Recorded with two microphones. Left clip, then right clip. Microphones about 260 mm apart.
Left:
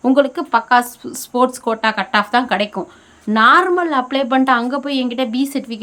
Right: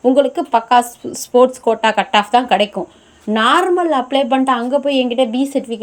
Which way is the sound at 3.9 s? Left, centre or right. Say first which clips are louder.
Right 3 dB; left.